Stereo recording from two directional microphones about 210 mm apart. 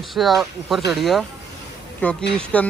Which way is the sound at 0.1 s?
Centre (ahead or behind).